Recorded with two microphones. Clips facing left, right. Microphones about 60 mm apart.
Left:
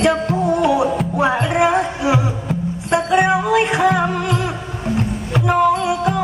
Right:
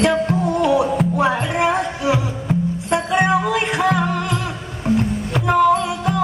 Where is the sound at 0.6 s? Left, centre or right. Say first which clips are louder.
Even; left.